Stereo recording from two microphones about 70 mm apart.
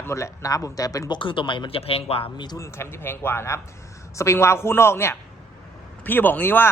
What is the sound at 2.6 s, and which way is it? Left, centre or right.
A man's voice, left.